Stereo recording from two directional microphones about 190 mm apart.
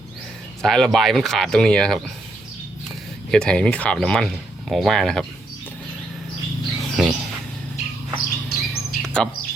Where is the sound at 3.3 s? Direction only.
5° left (ahead or behind).